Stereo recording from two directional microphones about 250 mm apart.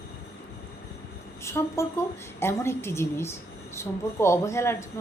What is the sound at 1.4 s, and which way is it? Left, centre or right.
A woman's voice, centre.